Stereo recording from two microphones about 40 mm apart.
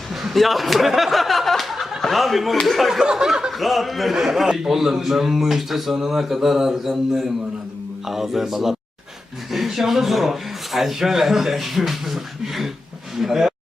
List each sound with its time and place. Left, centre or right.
0.1 s a man's voice: centre
0.9 s a sound: centre
2.0 s speech: centre
2.9 s a man's voice: centre
3.5 s a man's voice: centre